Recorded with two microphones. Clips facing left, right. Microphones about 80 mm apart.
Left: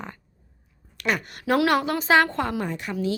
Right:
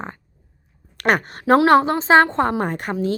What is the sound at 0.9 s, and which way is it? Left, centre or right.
A woman's voice, right.